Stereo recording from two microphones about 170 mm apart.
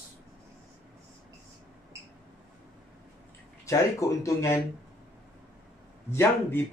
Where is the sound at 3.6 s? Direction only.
20° left (ahead or behind).